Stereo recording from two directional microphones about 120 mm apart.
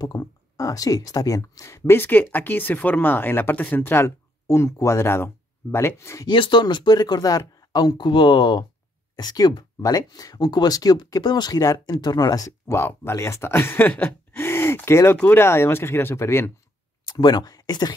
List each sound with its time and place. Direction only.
0.0 s speech: 30° left (ahead or behind)
6.2 s speech: 45° left (ahead or behind); by 16.5 s 20° left (ahead or behind)
17.0 s speech: 35° left (ahead or behind)